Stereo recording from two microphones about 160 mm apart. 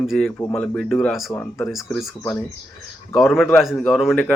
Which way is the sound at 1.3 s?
15° left (ahead or behind).